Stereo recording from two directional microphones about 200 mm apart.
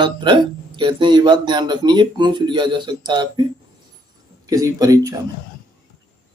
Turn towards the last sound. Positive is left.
turn(degrees=-15)  # may be behind; listen again after turning